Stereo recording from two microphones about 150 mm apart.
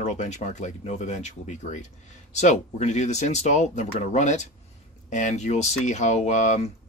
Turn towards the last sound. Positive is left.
turn(degrees=50)  # may be behind; listen again after turning